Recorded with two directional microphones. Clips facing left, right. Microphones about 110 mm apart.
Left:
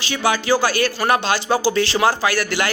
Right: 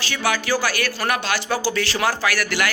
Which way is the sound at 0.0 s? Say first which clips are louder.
Left 3 dB; 20° left (ahead or behind).